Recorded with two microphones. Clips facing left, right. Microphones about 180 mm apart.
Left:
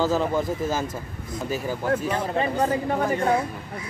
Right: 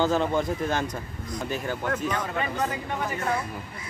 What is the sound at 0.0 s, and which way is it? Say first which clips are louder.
Speech: left 1 dB; 5° left (ahead or behind).